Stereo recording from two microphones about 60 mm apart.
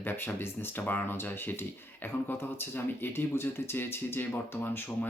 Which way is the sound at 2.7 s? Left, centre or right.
Left.